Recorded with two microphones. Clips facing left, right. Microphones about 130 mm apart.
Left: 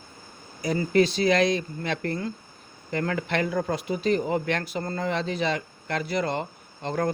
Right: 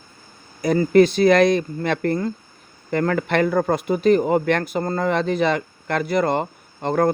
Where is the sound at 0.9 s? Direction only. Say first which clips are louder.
Right 7 dB; 55° right (ahead or behind).